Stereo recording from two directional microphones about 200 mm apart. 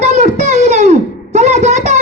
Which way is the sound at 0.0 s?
35° right (ahead or behind).